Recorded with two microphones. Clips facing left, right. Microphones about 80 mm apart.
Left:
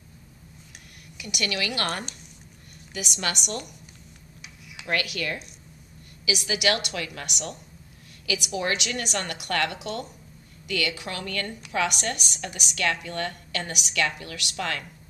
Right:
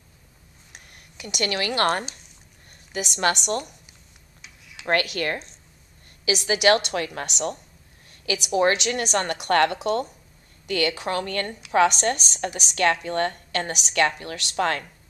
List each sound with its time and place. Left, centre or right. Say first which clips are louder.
1.1 s a woman's voice: right 3 dB; right
4.4 s tick-tock: left 1 dB; centre
4.8 s a woman's voice: right 5 dB; right